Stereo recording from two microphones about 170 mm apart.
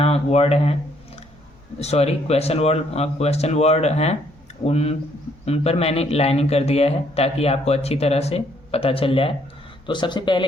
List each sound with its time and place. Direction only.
0.0 s speech: 35° left (ahead or behind)
1.8 s a man's voice: 40° left (ahead or behind)